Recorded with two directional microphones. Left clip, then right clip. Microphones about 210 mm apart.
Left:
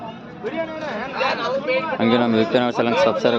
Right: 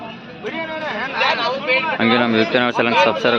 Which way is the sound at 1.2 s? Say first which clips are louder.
Right 3 dB; 50° left (ahead or behind).